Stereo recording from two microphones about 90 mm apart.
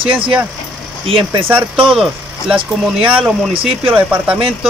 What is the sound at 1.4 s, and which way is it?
Speech, 15° right (ahead or behind).